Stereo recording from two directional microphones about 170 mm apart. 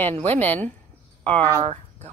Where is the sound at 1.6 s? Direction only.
40° right (ahead or behind).